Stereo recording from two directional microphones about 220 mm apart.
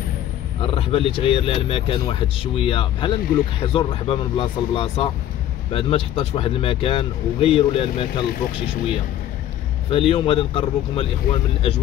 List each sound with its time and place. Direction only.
0.6 s speech: 25° left (ahead or behind)
9.8 s speech: 25° left (ahead or behind)